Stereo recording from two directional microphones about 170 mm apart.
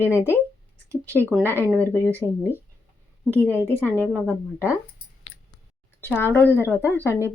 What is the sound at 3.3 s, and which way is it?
Speech, 15° right (ahead or behind).